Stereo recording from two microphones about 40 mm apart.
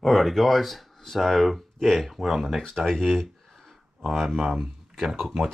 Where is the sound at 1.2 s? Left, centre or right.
Centre.